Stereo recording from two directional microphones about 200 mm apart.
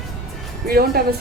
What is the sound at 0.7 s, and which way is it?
Speech, 50° right (ahead or behind).